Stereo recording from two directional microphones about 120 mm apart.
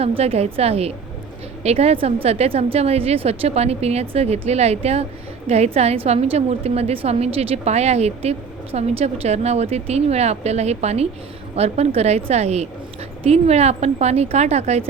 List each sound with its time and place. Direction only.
0.0 s a woman's voice: 55° right (ahead or behind)